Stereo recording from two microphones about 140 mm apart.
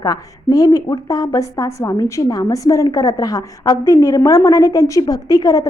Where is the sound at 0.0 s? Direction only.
25° left (ahead or behind).